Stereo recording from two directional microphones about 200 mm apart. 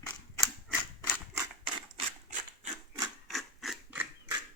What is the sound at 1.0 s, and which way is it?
Typewriter, 10° left (ahead or behind).